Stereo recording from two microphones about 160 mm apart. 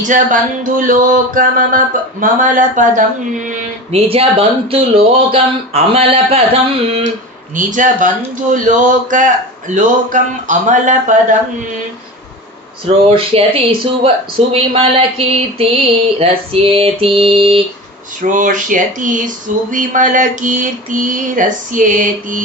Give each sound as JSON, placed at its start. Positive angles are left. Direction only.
{"t": 0.0, "sound": "music", "side_deg": -55}
{"t": 3.9, "sound": "speech", "side_deg": -40}
{"t": 7.5, "sound": "speech", "side_deg": -55}
{"t": 13.1, "sound": "speech", "side_deg": -35}
{"t": 18.2, "sound": "music", "side_deg": -55}